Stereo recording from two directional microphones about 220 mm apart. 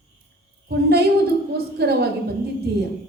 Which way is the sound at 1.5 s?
45° right (ahead or behind).